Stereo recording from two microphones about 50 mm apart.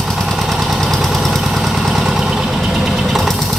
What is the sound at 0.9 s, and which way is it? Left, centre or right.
Vehicle, centre.